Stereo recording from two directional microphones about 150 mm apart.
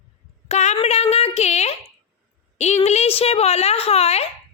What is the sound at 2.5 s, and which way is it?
A woman's voice, 50° left (ahead or behind).